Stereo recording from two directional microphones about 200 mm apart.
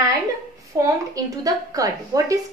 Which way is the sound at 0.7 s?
15° right (ahead or behind).